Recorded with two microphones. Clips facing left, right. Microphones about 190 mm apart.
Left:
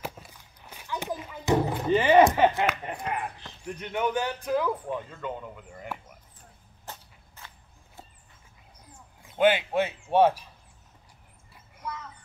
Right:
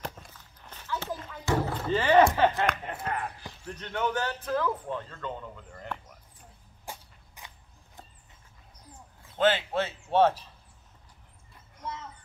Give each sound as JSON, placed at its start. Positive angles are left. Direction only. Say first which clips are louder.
{"t": 0.0, "sound": "walk", "louder": "left 1 dB", "side_deg": 10}
{"t": 2.6, "sound": "speech", "louder": "left 1 dB", "side_deg": 10}
{"t": 3.1, "sound": "basketball bounce", "louder": "even", "side_deg": 15}
{"t": 3.6, "sound": "speech", "louder": "left 2 dB", "side_deg": 15}
{"t": 6.9, "sound": "walk", "louder": "right 1 dB", "side_deg": -15}
{"t": 9.3, "sound": "speech", "louder": "left 3 dB", "side_deg": 15}